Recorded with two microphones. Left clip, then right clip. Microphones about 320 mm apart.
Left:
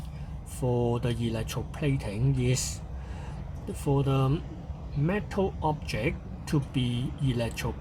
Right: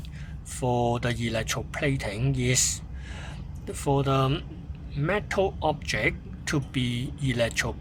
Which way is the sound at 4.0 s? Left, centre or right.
Right.